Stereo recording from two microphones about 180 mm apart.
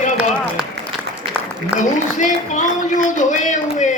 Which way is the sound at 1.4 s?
10° right (ahead or behind).